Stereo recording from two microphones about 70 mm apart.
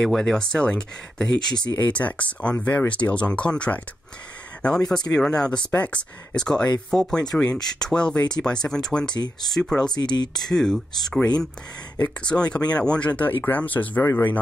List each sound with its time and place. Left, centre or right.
0.0 s speech: centre
9.9 s speech: left
10.3 s speech: centre; by 14.4 s left